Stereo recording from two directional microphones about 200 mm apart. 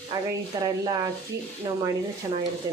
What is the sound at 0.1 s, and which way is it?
Speech, 20° right (ahead or behind).